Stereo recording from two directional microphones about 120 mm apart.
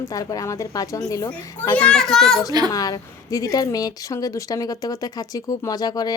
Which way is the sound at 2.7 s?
30° left (ahead or behind).